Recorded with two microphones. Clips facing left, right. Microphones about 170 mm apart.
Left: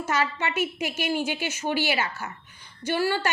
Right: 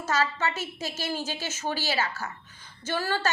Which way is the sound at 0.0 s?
15° left (ahead or behind).